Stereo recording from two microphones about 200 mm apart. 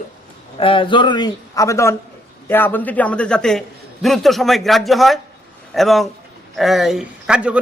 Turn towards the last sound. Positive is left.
turn(degrees=-5)  # may be behind; listen again after turning